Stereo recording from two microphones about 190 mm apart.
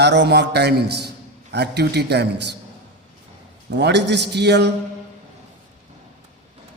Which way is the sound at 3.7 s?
60° right (ahead or behind).